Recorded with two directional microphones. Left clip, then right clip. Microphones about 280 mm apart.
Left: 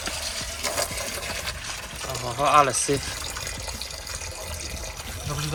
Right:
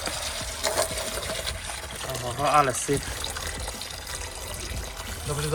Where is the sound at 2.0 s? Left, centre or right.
Centre.